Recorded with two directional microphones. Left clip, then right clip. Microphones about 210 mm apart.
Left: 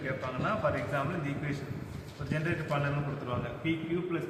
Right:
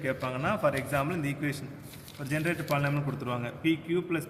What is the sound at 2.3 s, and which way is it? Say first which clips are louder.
A man's voice: right 3 dB; 60° right (ahead or behind).